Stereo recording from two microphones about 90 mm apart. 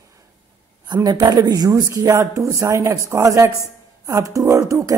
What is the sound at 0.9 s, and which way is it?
Speech, 45° right (ahead or behind).